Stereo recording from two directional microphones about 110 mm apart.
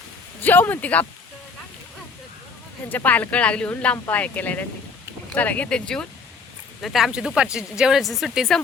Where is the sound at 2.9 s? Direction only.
15° left (ahead or behind).